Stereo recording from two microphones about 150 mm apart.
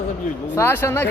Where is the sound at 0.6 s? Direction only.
15° left (ahead or behind).